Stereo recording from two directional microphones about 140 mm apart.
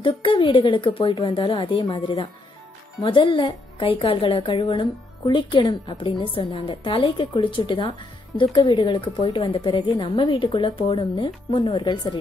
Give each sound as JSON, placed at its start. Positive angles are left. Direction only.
{"t": 0.0, "sound": "a woman's voice", "side_deg": 40}